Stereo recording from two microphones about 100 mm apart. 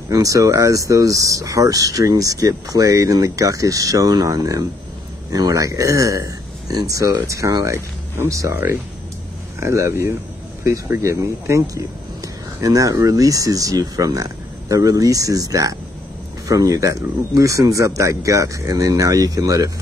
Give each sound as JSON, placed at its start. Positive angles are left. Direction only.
{"t": 0.1, "sound": "speech", "side_deg": -35}
{"t": 9.6, "sound": "speech", "side_deg": -30}